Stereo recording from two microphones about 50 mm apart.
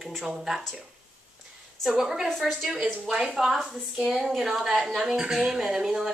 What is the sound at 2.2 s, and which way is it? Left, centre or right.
A woman's voice, centre.